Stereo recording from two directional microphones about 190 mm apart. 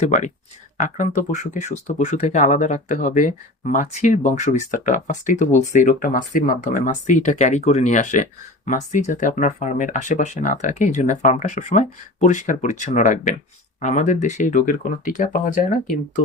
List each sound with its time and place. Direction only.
0.8 s speech: 40° left (ahead or behind)